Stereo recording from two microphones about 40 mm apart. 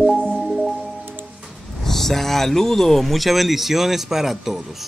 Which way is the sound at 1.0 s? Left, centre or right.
Right.